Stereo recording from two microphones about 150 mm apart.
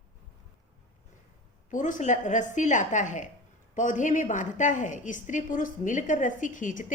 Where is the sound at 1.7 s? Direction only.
55° left (ahead or behind).